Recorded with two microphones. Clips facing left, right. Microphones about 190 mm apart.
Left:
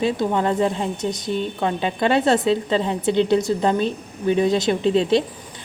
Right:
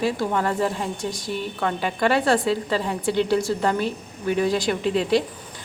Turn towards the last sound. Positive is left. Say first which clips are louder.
# left 3 dB
turn(degrees=25)  # may be behind; listen again after turning